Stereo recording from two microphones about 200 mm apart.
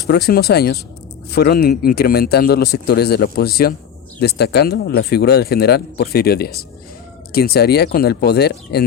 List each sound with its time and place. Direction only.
0.1 s speech: 50° left (ahead or behind)